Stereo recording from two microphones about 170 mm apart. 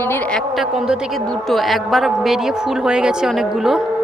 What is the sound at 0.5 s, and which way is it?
A woman's voice, 5° right (ahead or behind).